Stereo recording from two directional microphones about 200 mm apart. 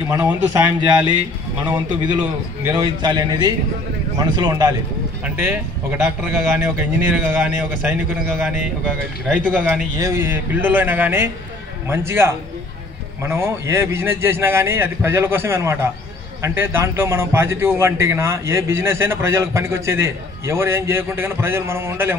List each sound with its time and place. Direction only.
0.1 s a man's voice: 15° right (ahead or behind)
2.8 s a man's voice: 20° right (ahead or behind)